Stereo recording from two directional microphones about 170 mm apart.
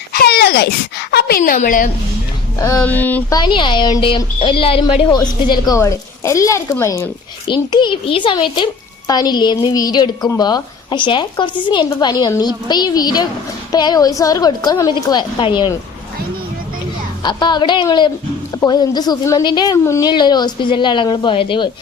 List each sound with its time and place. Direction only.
0.1 s speech: 70° left (ahead or behind); by 1.9 s 50° left (ahead or behind)
2.8 s speech: 10° left (ahead or behind)
3.3 s a child's voice: 25° left (ahead or behind)
7.4 s a child's voice: 25° left (ahead or behind)
17.2 s a child's voice: 25° left (ahead or behind)